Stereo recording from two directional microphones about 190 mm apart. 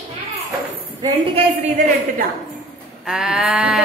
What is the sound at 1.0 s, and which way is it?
Speech, 30° right (ahead or behind).